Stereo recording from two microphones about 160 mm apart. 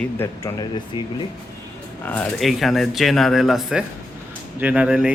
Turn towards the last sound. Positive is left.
turn(degrees=-5)  # may be behind; listen again after turning